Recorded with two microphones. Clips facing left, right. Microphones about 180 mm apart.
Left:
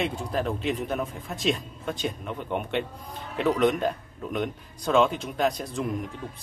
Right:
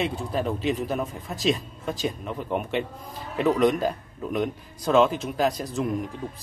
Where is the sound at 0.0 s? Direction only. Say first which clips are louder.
Right 1 dB; centre (ahead or behind).